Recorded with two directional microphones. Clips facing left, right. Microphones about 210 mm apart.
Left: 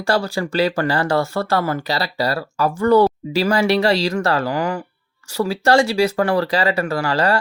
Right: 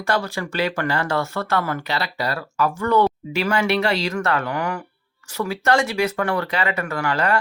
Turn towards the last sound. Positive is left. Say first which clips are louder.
# left 3 dB
turn(degrees=35)  # may be behind; listen again after turning